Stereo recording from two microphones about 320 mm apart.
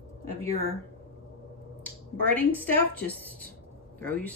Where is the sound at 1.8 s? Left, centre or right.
Centre.